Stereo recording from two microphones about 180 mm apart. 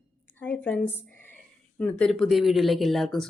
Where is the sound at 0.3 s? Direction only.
10° left (ahead or behind).